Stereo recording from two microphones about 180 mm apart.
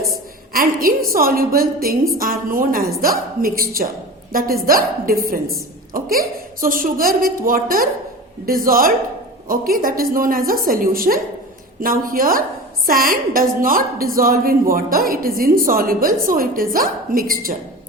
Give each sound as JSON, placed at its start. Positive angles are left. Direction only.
{"t": 0.5, "sound": "a woman's voice", "side_deg": -55}